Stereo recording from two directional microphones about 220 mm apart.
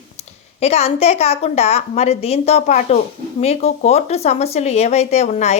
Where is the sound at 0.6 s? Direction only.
30° left (ahead or behind).